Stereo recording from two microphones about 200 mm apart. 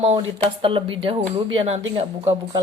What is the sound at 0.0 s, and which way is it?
Speech, 30° right (ahead or behind).